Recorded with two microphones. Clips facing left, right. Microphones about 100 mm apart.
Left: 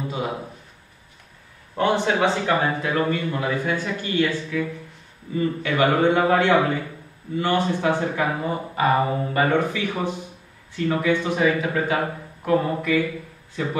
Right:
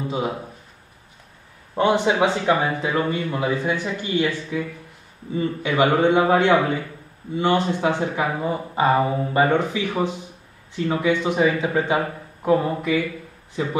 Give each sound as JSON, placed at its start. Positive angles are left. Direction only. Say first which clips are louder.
{"t": 1.8, "sound": "a man's voice", "louder": "right 2 dB", "side_deg": -15}